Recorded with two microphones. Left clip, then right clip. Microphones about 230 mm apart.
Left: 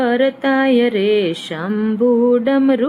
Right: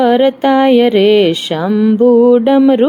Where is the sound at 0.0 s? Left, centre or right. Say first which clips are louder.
Right 6 dB; centre.